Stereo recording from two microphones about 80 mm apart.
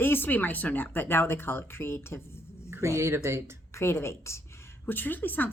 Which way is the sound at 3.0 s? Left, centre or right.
Right.